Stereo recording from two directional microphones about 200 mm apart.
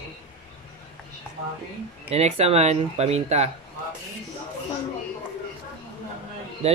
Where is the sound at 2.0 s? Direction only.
30° right (ahead or behind).